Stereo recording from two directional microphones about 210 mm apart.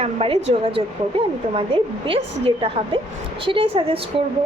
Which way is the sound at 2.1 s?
25° right (ahead or behind).